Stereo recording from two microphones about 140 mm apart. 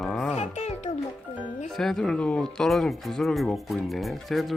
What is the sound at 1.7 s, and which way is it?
Speech, centre (ahead or behind).